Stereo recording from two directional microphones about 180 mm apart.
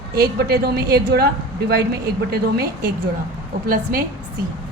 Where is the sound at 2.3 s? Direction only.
60° right (ahead or behind).